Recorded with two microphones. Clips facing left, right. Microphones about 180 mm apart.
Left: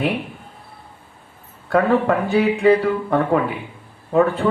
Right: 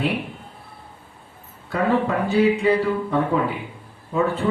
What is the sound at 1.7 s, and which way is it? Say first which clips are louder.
Speech: left 4 dB; 60° left (ahead or behind).